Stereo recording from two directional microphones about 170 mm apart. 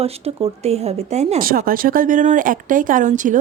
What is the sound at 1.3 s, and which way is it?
A woman's voice, 60° right (ahead or behind).